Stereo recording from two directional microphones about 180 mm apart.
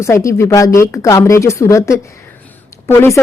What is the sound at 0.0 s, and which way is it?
Speech, 15° left (ahead or behind).